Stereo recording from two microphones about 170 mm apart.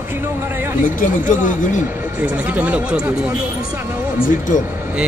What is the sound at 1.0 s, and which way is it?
Speech, 50° left (ahead or behind).